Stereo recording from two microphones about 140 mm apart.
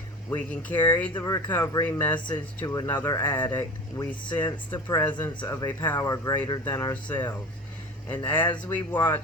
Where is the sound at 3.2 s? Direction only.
15° left (ahead or behind); by 4.6 s 35° left (ahead or behind).